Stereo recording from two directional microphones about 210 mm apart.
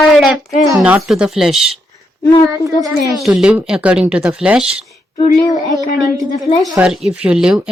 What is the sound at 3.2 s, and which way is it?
Speech, 5° right (ahead or behind).